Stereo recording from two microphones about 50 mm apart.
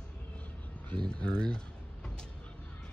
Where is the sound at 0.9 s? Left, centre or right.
Left.